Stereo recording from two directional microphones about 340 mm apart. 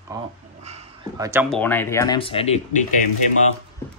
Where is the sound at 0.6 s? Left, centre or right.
Centre.